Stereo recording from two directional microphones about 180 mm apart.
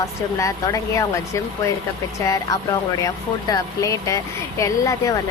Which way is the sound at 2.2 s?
20° left (ahead or behind).